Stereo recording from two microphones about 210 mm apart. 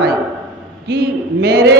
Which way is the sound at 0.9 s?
50° right (ahead or behind).